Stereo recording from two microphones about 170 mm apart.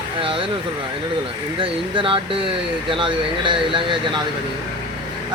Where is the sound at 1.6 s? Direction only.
30° right (ahead or behind).